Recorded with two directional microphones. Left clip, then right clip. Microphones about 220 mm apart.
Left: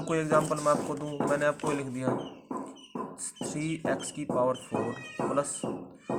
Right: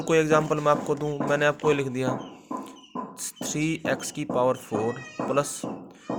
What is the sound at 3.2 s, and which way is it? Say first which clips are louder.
Speech: right 10 dB; 40° right (ahead or behind).